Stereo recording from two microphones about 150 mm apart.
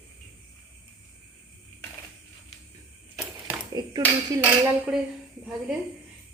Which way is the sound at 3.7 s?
25° right (ahead or behind).